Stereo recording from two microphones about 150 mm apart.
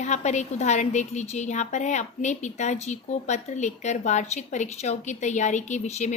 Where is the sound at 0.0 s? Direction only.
50° left (ahead or behind).